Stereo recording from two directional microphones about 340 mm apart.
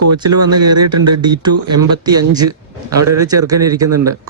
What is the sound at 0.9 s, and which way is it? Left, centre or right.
Speech, right.